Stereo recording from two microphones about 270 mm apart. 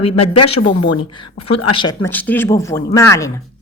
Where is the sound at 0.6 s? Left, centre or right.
Left.